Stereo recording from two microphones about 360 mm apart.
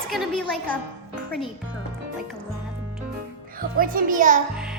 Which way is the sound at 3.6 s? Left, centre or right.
Right.